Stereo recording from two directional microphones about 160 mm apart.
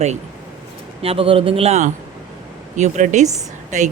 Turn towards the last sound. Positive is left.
turn(degrees=-50)  # may be behind; listen again after turning